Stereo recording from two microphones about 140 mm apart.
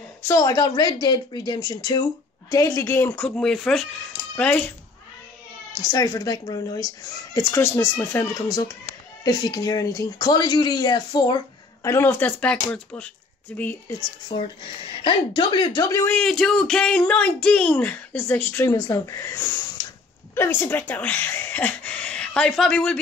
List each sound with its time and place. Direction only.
0.2 s speech: 25° left (ahead or behind); by 4.7 s 10° left (ahead or behind)
5.8 s speech: 25° left (ahead or behind)
9.2 s speech: 30° left (ahead or behind)
11.9 s speech: 15° left (ahead or behind)
14.3 s a woman's voice: 35° left (ahead or behind)
16.1 s speech: 5° left (ahead or behind)
18.7 s speech: 25° left (ahead or behind); by 22.9 s 5° left (ahead or behind)